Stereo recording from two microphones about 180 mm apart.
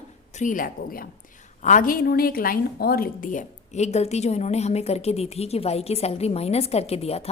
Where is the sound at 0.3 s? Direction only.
45° left (ahead or behind).